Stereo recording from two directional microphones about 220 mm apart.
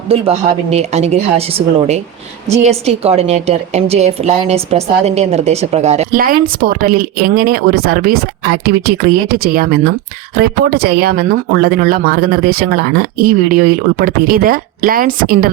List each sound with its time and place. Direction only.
0.1 s a woman's voice: 30° right (ahead or behind)